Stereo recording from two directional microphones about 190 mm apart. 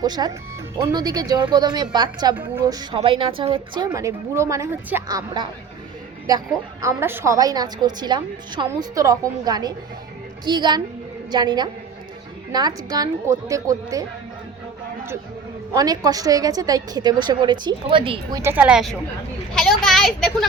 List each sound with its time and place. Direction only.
0.0 s a woman's voice: 20° right (ahead or behind)
3.0 s a woman's voice: 30° right (ahead or behind)
3.8 s a woman's voice: 15° right (ahead or behind)
15.7 s a woman's voice: 20° right (ahead or behind); by 20.5 s centre (ahead or behind)